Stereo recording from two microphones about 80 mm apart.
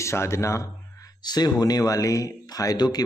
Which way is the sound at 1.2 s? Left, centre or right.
Left.